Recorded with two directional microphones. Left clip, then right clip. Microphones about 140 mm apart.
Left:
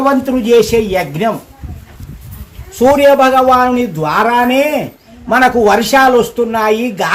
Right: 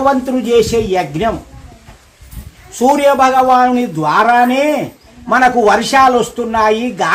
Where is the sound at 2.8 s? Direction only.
25° right (ahead or behind).